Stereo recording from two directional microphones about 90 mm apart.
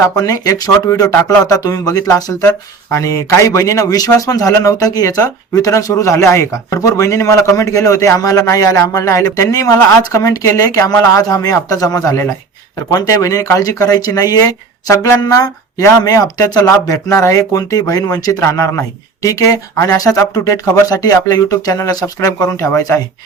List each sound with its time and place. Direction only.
0.0 s a man's voice: 40° left (ahead or behind)
14.8 s speech: 30° left (ahead or behind)
15.2 s a man's voice: 45° left (ahead or behind)
18.3 s a man's voice: 30° left (ahead or behind)